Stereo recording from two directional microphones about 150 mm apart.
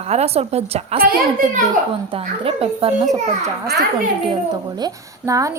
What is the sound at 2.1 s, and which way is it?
A woman's voice, 40° right (ahead or behind).